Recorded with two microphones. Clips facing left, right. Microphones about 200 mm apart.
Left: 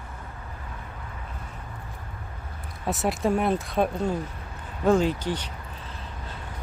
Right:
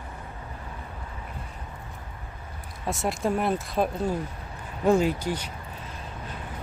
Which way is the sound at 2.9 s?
Centre (ahead or behind).